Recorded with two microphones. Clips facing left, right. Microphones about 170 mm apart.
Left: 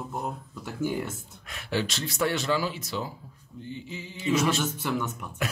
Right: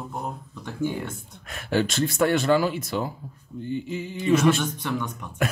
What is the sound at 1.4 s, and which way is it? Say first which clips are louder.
Speech: right 5 dB; 50° right (ahead or behind).